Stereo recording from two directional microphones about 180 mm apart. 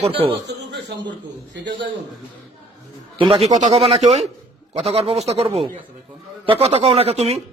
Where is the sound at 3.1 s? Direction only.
30° right (ahead or behind).